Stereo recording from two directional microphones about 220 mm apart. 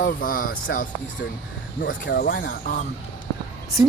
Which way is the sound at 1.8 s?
50° left (ahead or behind).